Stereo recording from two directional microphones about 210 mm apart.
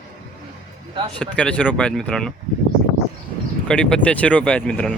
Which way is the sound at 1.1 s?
5° left (ahead or behind).